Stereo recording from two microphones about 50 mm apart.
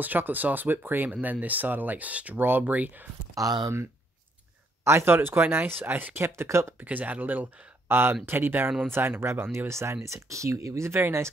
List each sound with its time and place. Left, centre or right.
0.0 s speech: right
3.4 s speech: right
4.8 s speech: right
6.1 s speech: right
6.8 s speech: right
7.9 s speech: right
10.0 s speech: right